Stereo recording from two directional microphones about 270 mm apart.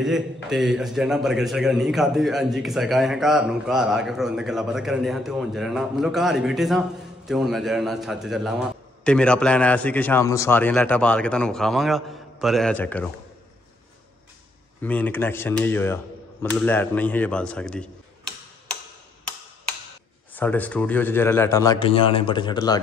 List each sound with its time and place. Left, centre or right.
0.0 s a man's voice: centre
14.8 s a man's voice: centre
20.3 s a man's voice: centre